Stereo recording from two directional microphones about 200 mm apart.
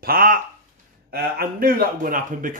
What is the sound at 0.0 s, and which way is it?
A man's voice, 45° right (ahead or behind).